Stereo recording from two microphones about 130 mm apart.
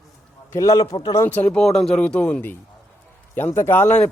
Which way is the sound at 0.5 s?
25° left (ahead or behind).